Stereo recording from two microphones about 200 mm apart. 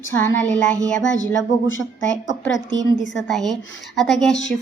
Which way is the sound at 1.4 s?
75° left (ahead or behind).